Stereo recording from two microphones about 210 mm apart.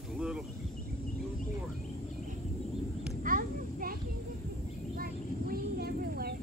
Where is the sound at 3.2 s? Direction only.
40° right (ahead or behind).